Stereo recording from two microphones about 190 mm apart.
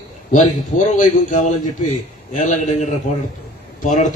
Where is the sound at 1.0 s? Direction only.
40° left (ahead or behind).